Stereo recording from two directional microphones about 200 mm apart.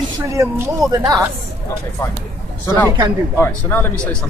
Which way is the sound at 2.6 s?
15° left (ahead or behind).